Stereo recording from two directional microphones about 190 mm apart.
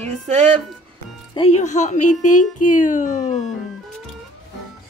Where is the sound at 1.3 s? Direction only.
35° left (ahead or behind).